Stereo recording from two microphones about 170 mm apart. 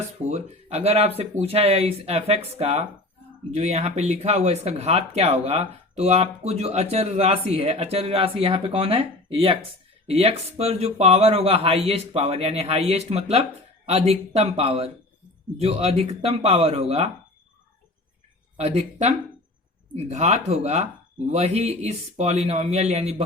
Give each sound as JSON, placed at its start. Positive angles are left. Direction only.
{"t": 0.3, "sound": "speech", "side_deg": -40}
{"t": 18.5, "sound": "speech", "side_deg": -40}